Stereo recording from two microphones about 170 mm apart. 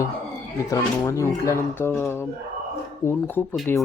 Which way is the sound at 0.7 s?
20° left (ahead or behind).